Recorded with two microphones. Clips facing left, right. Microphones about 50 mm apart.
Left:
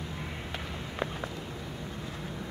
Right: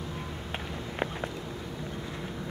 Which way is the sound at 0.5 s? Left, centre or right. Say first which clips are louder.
Right 2 dB; right.